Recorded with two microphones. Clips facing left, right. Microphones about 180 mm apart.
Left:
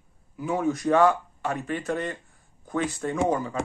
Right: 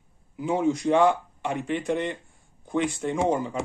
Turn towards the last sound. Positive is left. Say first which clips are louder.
# right 1 dB
turn(degrees=-20)  # may be behind; listen again after turning